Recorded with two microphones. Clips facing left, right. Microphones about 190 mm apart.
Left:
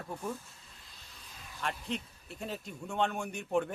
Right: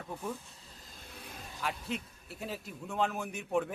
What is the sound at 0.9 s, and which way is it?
Vehicle, 50° right (ahead or behind).